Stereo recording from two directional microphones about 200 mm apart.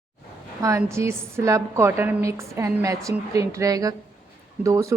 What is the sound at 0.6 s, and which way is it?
A woman's voice, 15° right (ahead or behind).